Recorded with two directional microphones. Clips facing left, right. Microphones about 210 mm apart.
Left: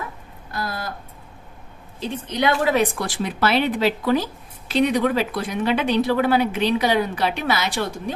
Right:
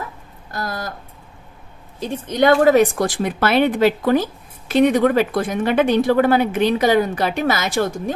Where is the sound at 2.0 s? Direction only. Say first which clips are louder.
Right 5 dB; 45° right (ahead or behind).